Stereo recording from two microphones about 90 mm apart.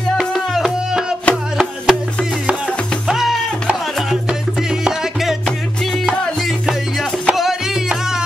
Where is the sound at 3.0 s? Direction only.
5° right (ahead or behind).